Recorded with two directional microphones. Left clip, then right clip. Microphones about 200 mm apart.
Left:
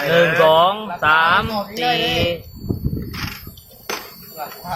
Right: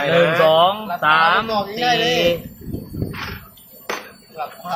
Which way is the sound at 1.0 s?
5° left (ahead or behind).